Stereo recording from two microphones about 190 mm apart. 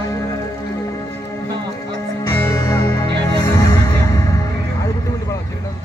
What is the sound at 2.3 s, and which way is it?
Music, 20° left (ahead or behind).